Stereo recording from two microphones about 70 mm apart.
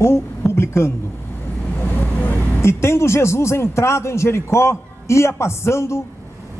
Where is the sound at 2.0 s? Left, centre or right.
Left.